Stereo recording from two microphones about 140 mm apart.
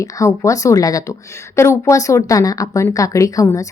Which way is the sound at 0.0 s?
20° left (ahead or behind).